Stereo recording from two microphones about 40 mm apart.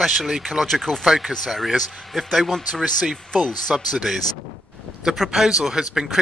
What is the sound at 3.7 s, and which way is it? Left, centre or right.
Speech, centre.